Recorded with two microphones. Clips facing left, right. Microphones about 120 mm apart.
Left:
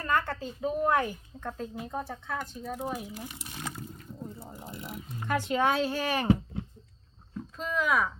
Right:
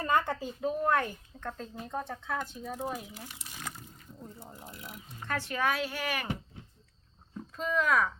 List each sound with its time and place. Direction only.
0.0 s a sound: 20° right (ahead or behind)
0.6 s speech: 5° left (ahead or behind)
3.2 s speech: 15° left (ahead or behind)
7.5 s speech: centre (ahead or behind)